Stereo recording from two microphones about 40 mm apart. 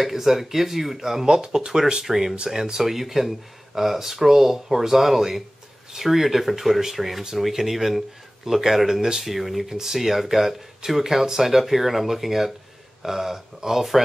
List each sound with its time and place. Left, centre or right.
0.0 s speech: centre